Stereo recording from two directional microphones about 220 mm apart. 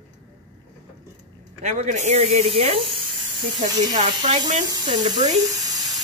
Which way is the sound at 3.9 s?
30° right (ahead or behind).